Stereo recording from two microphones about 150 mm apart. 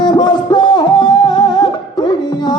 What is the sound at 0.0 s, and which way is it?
Music, 30° left (ahead or behind).